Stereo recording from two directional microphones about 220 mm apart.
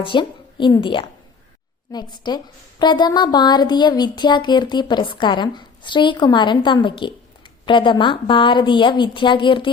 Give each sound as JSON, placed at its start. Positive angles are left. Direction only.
{"t": 0.0, "sound": "a woman's voice", "side_deg": 20}